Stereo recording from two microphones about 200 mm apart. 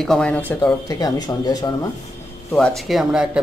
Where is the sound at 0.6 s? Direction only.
20° left (ahead or behind).